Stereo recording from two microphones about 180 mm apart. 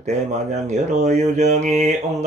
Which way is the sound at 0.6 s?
40° right (ahead or behind).